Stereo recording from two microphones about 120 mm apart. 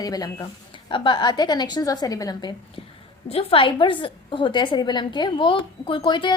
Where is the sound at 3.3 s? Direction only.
50° left (ahead or behind).